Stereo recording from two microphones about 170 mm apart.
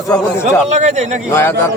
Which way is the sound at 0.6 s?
45° right (ahead or behind).